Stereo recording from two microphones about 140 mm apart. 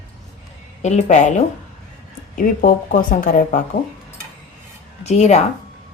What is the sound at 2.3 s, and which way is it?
Speech, 75° left (ahead or behind).